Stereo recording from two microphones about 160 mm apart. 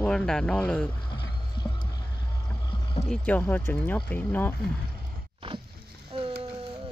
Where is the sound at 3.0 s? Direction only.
5° left (ahead or behind).